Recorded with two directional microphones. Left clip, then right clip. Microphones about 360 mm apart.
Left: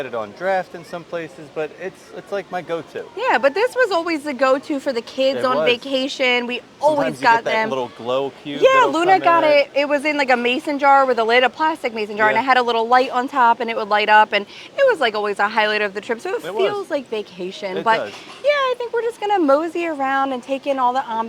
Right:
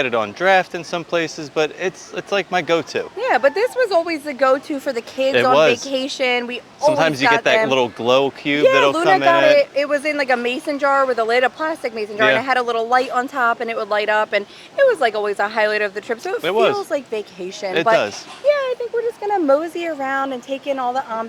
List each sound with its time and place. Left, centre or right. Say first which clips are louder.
0.0 s speech: right 6 dB; right
3.2 s speech: even; centre
7.7 s speech: right 6 dB; right
8.6 s speech: left 1 dB; centre
16.4 s speech: right 7 dB; right
16.9 s speech: right 1 dB; centre
18.4 s speech: even; left